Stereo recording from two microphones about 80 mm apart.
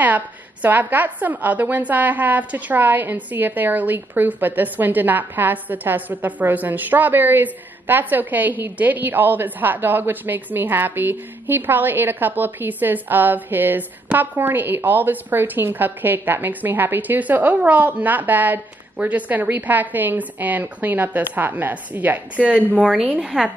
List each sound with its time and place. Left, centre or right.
0.0 s a woman's voice: right